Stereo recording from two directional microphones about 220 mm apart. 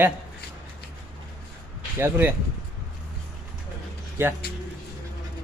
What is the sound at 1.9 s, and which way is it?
Speech, 10° right (ahead or behind).